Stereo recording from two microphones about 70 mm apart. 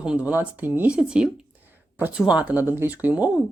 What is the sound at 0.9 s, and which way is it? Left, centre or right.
Speech, centre.